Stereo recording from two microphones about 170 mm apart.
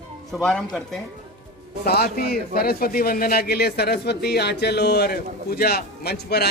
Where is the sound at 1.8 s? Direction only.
65° left (ahead or behind).